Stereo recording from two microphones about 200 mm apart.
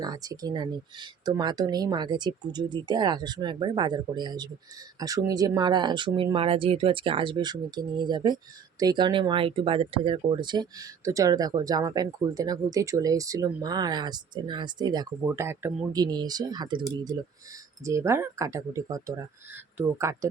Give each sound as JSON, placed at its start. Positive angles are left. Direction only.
{"t": 0.0, "sound": "speech", "side_deg": -20}